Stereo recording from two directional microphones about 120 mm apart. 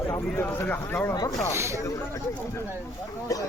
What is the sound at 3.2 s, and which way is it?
Speech, 30° left (ahead or behind).